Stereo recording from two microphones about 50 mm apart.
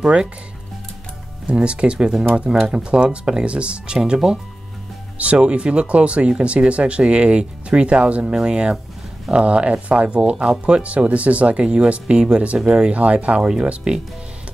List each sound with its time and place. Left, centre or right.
0.0 s speech: right
1.5 s speech: right
12.9 s speech: right